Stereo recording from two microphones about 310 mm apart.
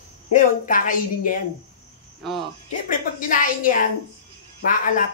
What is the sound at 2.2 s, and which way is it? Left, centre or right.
Cricket, centre.